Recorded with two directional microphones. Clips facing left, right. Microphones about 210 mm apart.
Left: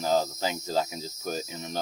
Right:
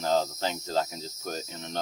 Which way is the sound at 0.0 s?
5° left (ahead or behind).